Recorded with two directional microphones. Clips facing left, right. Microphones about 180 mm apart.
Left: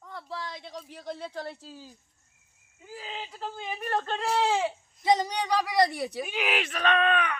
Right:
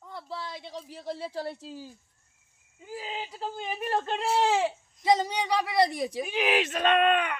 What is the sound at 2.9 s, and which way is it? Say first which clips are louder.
Speech: right 3 dB; 10° right (ahead or behind).